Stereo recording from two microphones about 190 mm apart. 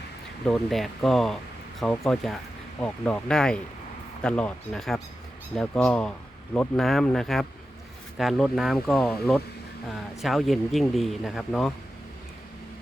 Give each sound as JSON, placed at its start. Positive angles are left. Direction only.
{"t": 0.4, "sound": "speech", "side_deg": 0}